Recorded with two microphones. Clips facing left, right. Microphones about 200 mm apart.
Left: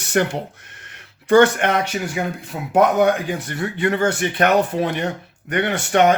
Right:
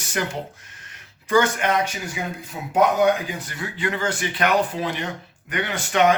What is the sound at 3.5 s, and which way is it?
Speech, 60° left (ahead or behind).